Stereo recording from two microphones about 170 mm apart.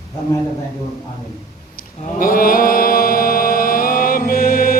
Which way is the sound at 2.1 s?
55° left (ahead or behind).